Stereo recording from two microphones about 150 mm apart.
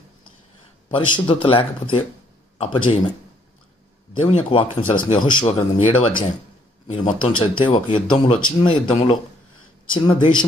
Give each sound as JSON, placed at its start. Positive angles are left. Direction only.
{"t": 0.8, "sound": "speech", "side_deg": 35}
{"t": 4.1, "sound": "speech", "side_deg": 40}